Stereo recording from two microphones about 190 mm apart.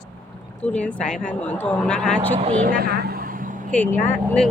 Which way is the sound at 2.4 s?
35° right (ahead or behind).